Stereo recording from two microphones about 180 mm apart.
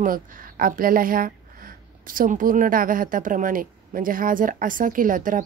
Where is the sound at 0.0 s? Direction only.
50° right (ahead or behind).